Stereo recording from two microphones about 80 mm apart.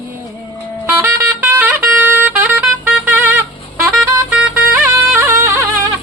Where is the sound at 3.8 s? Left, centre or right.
Centre.